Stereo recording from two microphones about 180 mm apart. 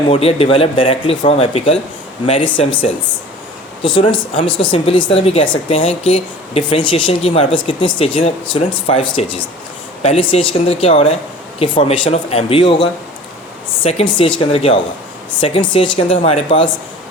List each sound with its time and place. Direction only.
0.1 s speech: 35° left (ahead or behind)